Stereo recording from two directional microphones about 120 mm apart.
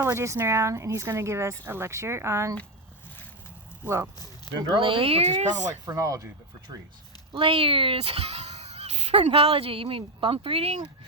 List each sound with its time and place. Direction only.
0.0 s speech: 20° right (ahead or behind)
3.8 s speech: 25° right (ahead or behind)
4.5 s speech: 35° left (ahead or behind)
4.8 s speech: 45° right (ahead or behind); by 5.7 s 80° right
5.9 s speech: 30° right (ahead or behind)
7.3 s speech: 50° right (ahead or behind)